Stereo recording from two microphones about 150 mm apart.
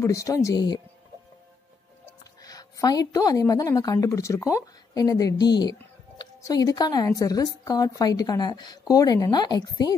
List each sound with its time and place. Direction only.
0.0 s a woman's voice: 20° left (ahead or behind)
2.4 s a woman's voice: 25° left (ahead or behind)